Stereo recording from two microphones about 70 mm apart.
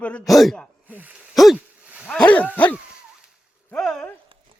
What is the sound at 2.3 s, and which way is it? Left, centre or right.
Dog, left.